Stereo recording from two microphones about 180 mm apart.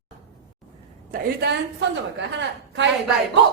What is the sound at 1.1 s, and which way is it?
Speech, 65° right (ahead or behind).